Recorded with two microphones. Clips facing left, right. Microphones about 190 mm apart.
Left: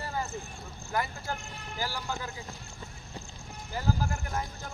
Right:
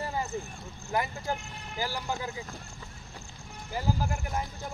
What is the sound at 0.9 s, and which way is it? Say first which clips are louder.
Speech: right 2 dB; 15° right (ahead or behind).